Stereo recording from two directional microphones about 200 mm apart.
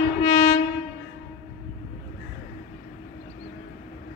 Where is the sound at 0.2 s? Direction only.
40° left (ahead or behind).